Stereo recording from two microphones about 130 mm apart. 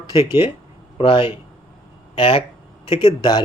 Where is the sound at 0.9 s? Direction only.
40° left (ahead or behind).